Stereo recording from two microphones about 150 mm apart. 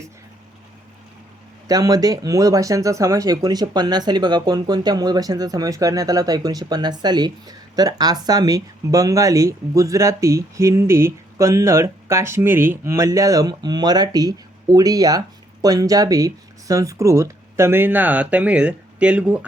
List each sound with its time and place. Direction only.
1.6 s speech: 25° right (ahead or behind); by 19.5 s 10° right (ahead or behind)